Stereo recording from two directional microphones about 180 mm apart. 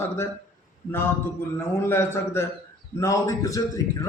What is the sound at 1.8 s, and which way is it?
A man's voice, 15° left (ahead or behind).